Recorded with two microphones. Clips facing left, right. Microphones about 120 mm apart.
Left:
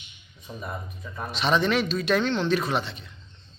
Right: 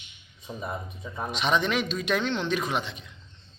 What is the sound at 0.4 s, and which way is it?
A man's voice, 20° right (ahead or behind).